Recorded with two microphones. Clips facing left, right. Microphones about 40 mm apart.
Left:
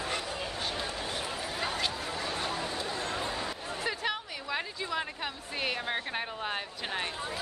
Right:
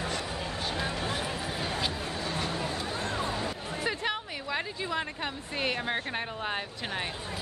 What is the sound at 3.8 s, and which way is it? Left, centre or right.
Speech, centre.